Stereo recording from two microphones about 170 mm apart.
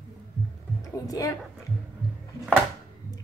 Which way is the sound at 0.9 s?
20° left (ahead or behind).